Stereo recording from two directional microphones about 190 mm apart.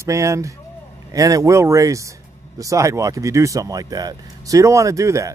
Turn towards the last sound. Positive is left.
turn(degrees=-15)  # may be behind; listen again after turning